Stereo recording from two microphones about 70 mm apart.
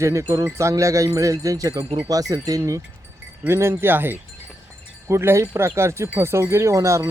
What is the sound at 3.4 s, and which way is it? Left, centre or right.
Speech, right.